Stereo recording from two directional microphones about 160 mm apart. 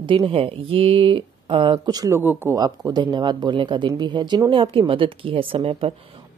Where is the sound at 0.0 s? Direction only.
35° right (ahead or behind); by 2.6 s 15° right (ahead or behind).